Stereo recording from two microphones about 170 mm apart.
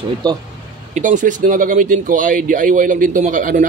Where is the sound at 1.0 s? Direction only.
50° right (ahead or behind).